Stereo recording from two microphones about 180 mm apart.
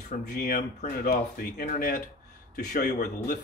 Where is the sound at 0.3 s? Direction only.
50° left (ahead or behind).